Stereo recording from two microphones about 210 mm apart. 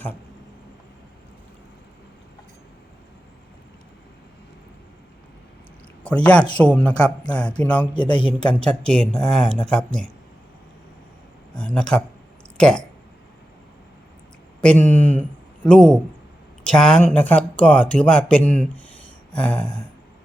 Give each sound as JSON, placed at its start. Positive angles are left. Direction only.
{"t": 6.0, "sound": "speech", "side_deg": 5}
{"t": 7.9, "sound": "a man's voice", "side_deg": 25}
{"t": 8.4, "sound": "speech", "side_deg": 5}
{"t": 11.5, "sound": "speech", "side_deg": 5}
{"t": 14.6, "sound": "speech", "side_deg": 5}